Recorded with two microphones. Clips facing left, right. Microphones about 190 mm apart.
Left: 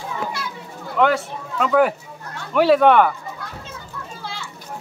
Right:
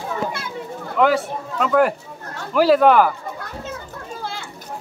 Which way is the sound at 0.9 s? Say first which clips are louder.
Right 1 dB; centre (ahead or behind).